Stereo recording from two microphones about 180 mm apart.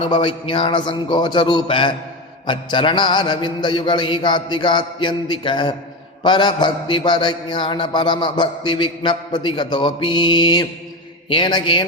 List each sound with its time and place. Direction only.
0.0 s a man's voice: 30° left (ahead or behind)